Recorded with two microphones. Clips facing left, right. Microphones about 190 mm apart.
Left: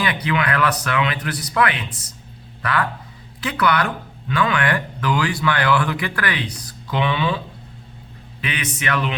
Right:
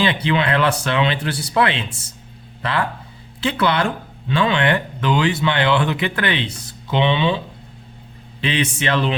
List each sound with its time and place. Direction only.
0.0 s speech: 25° right (ahead or behind)